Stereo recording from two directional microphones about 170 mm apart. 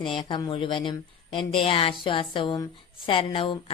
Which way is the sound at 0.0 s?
30° left (ahead or behind).